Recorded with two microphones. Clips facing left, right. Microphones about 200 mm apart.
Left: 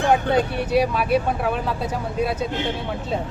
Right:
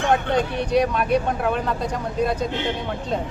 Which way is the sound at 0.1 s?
5° left (ahead or behind).